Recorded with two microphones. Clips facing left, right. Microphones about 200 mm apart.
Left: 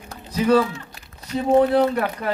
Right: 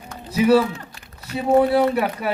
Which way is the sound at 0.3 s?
10° right (ahead or behind).